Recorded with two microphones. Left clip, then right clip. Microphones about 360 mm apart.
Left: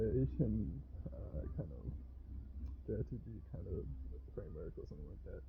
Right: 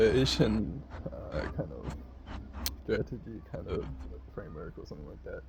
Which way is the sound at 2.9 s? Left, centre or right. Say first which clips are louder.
Right 11 dB; centre.